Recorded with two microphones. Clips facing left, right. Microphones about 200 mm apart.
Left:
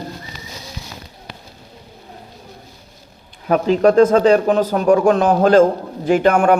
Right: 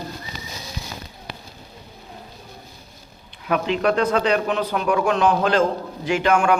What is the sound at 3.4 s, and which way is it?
Speech, 35° left (ahead or behind).